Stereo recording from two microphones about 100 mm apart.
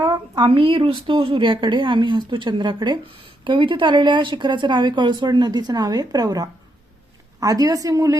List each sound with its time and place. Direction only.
0.0 s a woman's voice: 45° right (ahead or behind)